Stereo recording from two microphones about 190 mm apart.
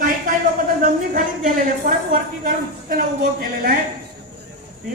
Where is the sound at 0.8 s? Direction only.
45° right (ahead or behind).